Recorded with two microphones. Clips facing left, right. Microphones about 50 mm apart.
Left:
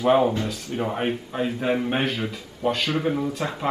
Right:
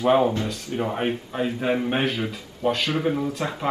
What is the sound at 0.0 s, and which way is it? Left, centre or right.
Speech, centre.